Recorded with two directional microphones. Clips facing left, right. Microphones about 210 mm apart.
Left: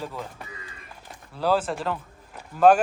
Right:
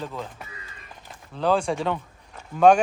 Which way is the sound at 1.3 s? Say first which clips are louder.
Right 1 dB; 5° left (ahead or behind).